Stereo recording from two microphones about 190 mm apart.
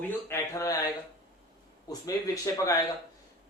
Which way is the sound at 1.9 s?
15° left (ahead or behind).